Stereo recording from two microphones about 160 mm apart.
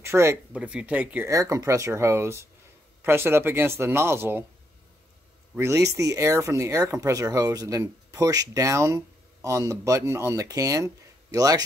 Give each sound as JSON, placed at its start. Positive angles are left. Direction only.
{"t": 0.0, "sound": "speech", "side_deg": -15}
{"t": 1.3, "sound": "speech", "side_deg": -20}
{"t": 5.6, "sound": "speech", "side_deg": -15}